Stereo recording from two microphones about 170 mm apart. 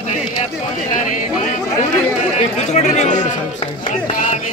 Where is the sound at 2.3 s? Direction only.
45° left (ahead or behind).